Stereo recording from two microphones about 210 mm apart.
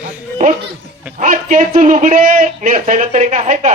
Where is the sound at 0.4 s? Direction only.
40° right (ahead or behind).